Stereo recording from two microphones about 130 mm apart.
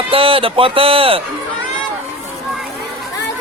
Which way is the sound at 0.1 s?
45° right (ahead or behind).